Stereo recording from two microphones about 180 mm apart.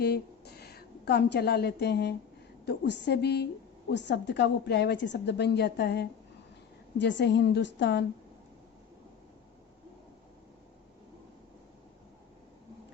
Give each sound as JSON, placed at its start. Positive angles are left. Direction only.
{"t": 0.0, "sound": "a woman's voice", "side_deg": 60}